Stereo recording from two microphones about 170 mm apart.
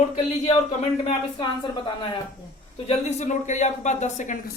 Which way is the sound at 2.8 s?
45° left (ahead or behind).